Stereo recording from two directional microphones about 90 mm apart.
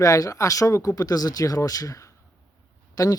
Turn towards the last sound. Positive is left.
turn(degrees=45)  # may be behind; listen again after turning